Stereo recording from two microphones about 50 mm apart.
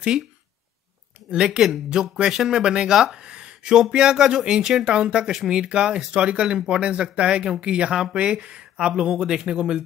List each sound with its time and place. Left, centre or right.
1.3 s speech: centre